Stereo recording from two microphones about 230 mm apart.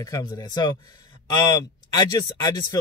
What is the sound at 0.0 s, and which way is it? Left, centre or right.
Speech, centre.